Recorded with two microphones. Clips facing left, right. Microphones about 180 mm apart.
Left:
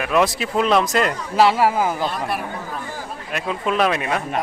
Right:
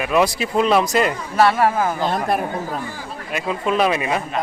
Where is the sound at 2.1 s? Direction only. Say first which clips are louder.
Right 5 dB; 45° right (ahead or behind).